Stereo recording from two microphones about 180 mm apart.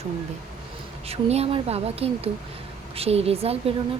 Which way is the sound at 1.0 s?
35° right (ahead or behind).